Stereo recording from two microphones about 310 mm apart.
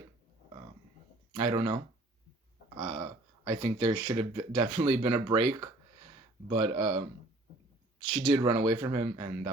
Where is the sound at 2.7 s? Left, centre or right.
Centre.